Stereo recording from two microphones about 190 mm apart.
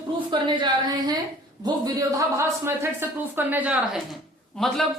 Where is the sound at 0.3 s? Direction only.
25° right (ahead or behind).